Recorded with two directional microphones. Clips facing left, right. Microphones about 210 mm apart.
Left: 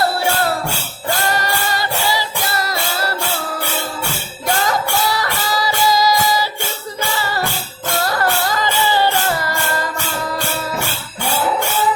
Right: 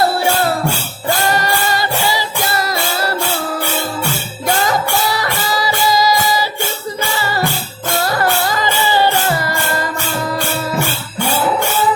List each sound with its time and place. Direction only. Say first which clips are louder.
1.4 s music: right 3 dB; 15° right (ahead or behind)
5.2 s music: right 2 dB; 10° right (ahead or behind)
8.2 s music: right 2 dB; 15° right (ahead or behind)